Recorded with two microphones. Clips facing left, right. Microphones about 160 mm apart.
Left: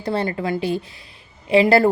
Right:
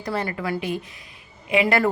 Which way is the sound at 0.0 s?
30° left (ahead or behind).